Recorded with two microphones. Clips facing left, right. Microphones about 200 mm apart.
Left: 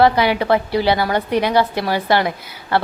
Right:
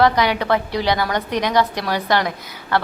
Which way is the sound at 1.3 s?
10° left (ahead or behind).